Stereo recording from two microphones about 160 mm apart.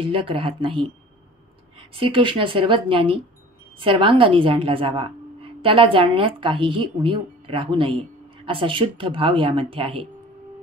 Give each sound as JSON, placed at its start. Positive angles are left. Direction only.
{"t": 0.1, "sound": "a woman's voice", "side_deg": -35}
{"t": 2.0, "sound": "a woman's voice", "side_deg": -30}